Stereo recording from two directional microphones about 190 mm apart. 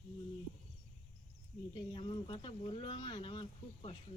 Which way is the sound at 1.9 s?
25° left (ahead or behind).